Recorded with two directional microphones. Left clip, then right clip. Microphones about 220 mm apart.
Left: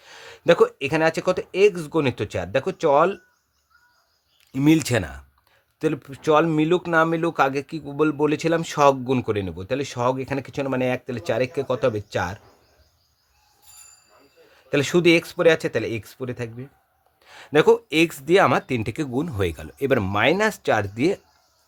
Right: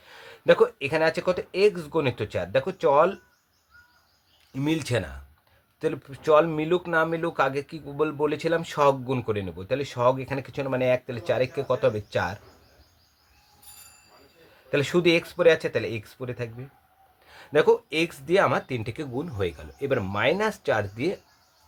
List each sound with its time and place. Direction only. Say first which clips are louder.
0.0 s speech: left 2 dB; 40° left (ahead or behind)
4.5 s speech: left 7 dB; 50° left (ahead or behind)
14.7 s speech: left 4 dB; 35° left (ahead or behind)